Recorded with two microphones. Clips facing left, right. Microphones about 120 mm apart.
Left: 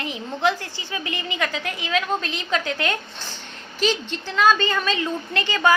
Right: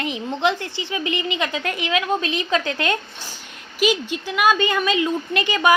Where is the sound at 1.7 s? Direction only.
85° right.